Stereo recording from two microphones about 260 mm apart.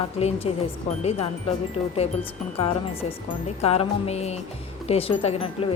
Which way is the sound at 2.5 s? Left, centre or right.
Left.